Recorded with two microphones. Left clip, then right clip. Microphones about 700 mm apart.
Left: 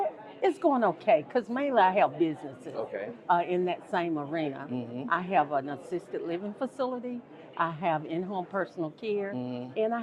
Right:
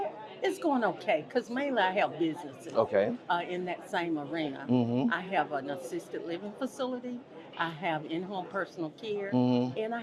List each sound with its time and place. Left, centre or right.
0.6 s a woman's voice: left
2.7 s speech: right
3.2 s a woman's voice: left
4.7 s speech: right
5.1 s a woman's voice: left
9.3 s speech: right
9.7 s a woman's voice: left